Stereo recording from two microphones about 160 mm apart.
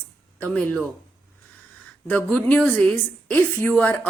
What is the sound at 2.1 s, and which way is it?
A woman's voice, 10° left (ahead or behind).